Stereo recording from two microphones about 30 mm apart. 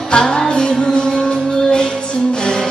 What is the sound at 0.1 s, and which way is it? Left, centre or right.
Music, left.